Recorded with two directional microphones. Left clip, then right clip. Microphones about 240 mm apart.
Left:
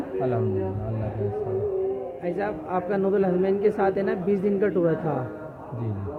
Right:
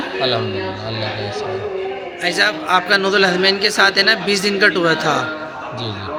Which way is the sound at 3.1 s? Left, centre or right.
Centre.